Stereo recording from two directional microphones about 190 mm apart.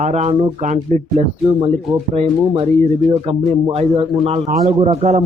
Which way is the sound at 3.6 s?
25° right (ahead or behind).